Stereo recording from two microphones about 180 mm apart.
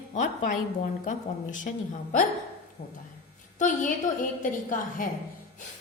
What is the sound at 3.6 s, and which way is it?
A woman's voice, 45° left (ahead or behind).